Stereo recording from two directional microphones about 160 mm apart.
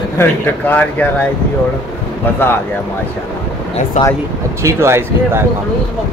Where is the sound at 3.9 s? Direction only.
50° left (ahead or behind).